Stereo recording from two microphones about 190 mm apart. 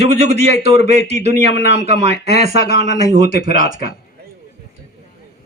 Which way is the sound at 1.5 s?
65° left (ahead or behind).